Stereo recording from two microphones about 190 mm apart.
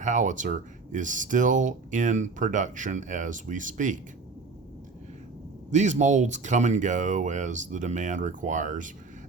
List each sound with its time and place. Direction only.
0.0 s speech: 40° right (ahead or behind)
5.7 s speech: 40° right (ahead or behind)